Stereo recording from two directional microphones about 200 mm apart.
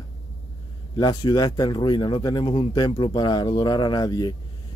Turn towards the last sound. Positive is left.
turn(degrees=20)  # may be behind; listen again after turning